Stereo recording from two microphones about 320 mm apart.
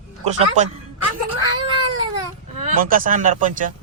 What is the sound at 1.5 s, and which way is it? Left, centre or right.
Cat, centre.